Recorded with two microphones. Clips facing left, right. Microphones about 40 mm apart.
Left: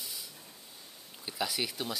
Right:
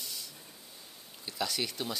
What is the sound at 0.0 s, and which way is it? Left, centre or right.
Hiss, centre.